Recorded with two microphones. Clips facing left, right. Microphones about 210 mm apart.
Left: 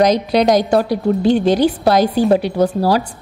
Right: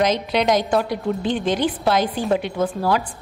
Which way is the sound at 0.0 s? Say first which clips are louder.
Left 6 dB; 40° left (ahead or behind).